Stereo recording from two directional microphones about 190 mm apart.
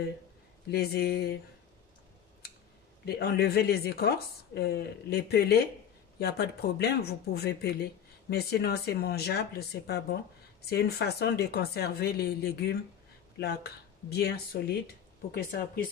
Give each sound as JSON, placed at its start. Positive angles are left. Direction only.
{"t": 0.7, "sound": "speech", "side_deg": 55}
{"t": 3.1, "sound": "speech", "side_deg": 55}